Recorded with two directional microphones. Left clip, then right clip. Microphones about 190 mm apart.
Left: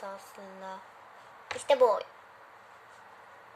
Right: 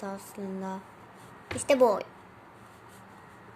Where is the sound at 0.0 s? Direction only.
15° right (ahead or behind).